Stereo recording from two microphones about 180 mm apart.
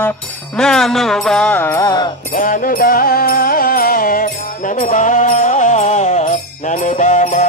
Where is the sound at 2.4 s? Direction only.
50° left (ahead or behind).